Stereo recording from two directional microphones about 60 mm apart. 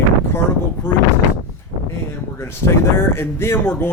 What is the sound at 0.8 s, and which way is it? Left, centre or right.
Speech, left.